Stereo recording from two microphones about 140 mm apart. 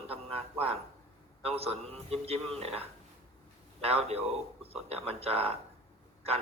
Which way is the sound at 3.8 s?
45° right (ahead or behind).